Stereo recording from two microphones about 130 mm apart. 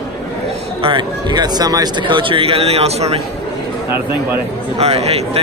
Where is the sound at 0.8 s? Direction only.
40° right (ahead or behind).